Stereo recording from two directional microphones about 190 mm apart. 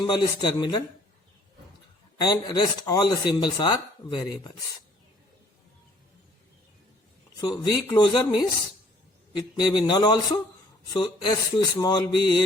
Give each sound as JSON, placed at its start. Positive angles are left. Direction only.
{"t": 0.0, "sound": "speech", "side_deg": 20}
{"t": 2.1, "sound": "speech", "side_deg": 20}
{"t": 7.9, "sound": "speech", "side_deg": 20}